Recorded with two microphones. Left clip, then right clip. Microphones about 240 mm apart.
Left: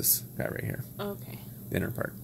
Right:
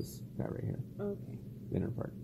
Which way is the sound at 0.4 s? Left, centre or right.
Left.